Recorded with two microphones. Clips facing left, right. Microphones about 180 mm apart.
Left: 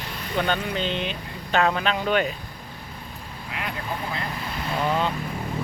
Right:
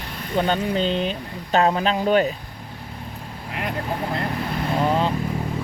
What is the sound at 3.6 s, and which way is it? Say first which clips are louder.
Vehicle: right 5 dB; 50° right (ahead or behind).